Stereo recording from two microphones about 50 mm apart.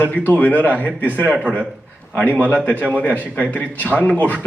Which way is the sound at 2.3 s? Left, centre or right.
Left.